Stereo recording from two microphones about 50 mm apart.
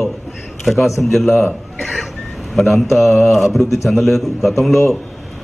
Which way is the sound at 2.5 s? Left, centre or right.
Centre.